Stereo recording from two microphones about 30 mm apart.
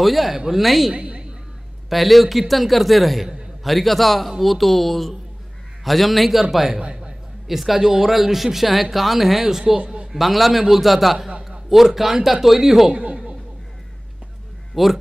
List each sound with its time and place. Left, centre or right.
0.0 s a man's voice: centre
0.9 s a sound: right
1.9 s a man's voice: centre
9.5 s speech: centre
10.1 s a man's voice: centre
12.9 s a sound: right
14.8 s speech: centre